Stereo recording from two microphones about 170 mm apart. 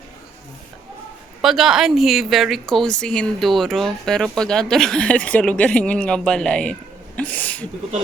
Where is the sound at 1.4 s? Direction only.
Centre (ahead or behind).